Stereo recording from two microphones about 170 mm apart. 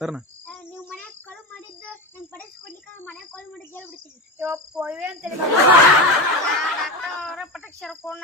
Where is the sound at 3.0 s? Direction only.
10° left (ahead or behind).